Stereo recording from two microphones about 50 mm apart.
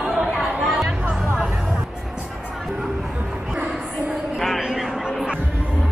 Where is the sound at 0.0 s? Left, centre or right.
Centre.